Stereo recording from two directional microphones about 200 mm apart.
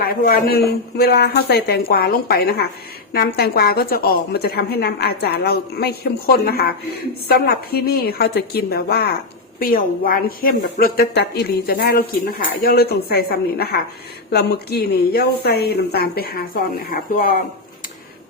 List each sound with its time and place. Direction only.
0.0 s a woman's voice: 50° left (ahead or behind)